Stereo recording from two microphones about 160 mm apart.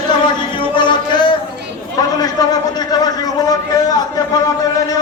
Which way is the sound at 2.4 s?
25° left (ahead or behind).